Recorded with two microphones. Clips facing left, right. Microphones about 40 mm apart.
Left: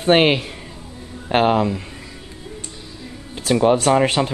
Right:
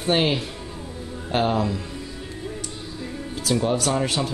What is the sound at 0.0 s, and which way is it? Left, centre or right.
Speech, left.